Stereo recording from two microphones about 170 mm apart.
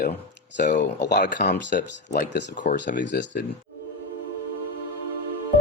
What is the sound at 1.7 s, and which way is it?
Speech, 75° left (ahead or behind).